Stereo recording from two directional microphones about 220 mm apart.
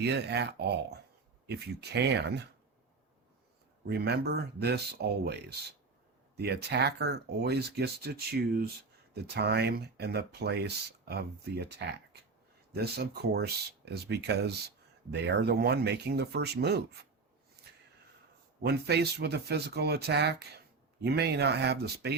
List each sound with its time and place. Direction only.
0.0 s speech: 50° right (ahead or behind)
3.8 s speech: 45° right (ahead or behind)
17.6 s snort: 45° right (ahead or behind)
18.6 s speech: 50° right (ahead or behind)